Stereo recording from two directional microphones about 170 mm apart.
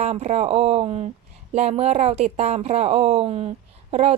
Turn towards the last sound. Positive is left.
turn(degrees=-40)  # may be behind; listen again after turning